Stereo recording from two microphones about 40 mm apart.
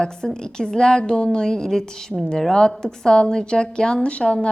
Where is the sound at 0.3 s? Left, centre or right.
Centre.